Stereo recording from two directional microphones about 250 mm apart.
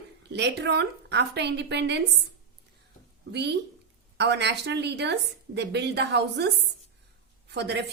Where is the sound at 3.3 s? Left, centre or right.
Right.